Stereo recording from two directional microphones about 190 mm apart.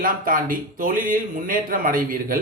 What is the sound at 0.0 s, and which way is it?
A man's voice, 45° right (ahead or behind).